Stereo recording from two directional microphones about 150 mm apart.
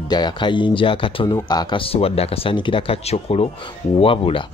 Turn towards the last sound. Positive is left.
turn(degrees=35)  # may be behind; listen again after turning